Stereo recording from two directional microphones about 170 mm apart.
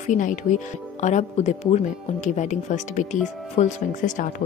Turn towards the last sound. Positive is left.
turn(degrees=45)  # may be behind; listen again after turning